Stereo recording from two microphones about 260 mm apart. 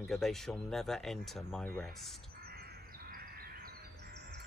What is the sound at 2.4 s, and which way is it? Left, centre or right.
Crow, right.